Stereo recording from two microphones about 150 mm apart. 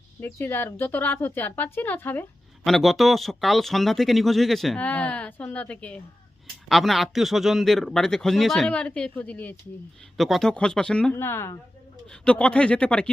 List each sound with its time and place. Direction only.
0.2 s a woman's voice: 15° left (ahead or behind)
2.6 s speech: centre (ahead or behind)
11.1 s a woman's voice: 15° left (ahead or behind)